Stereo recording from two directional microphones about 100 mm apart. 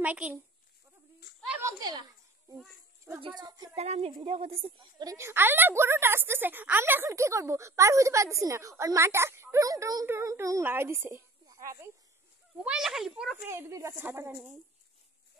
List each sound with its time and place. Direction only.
0.0 s a child's voice: 15° right (ahead or behind)
3.2 s a woman's voice: 50° right (ahead or behind)
3.7 s a woman's voice: 90° right
4.2 s a woman's voice: 70° right (ahead or behind)
4.9 s a woman's voice: 40° right (ahead or behind)
5.2 s a woman's voice: 20° right (ahead or behind); by 10.0 s 35° right (ahead or behind)
10.0 s a woman's voice: 25° right (ahead or behind)
11.4 s a sound: 35° right (ahead or behind)
12.6 s a child's voice: 5° right (ahead or behind)
13.4 s a woman's voice: 25° right (ahead or behind)